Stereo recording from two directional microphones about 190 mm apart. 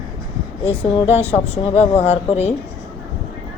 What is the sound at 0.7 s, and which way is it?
A woman's voice, 30° left (ahead or behind).